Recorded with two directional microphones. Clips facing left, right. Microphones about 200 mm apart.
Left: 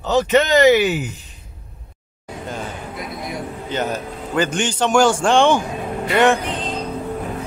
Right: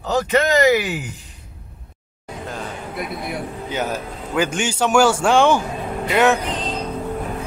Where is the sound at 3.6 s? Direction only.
10° right (ahead or behind).